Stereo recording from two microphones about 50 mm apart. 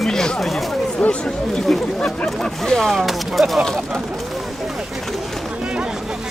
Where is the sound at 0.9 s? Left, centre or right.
Left.